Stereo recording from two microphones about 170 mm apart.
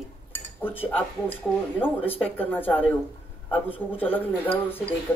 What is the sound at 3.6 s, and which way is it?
Speech, 35° left (ahead or behind).